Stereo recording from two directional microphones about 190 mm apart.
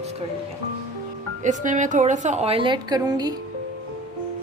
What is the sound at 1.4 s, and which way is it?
A woman's voice, 40° right (ahead or behind).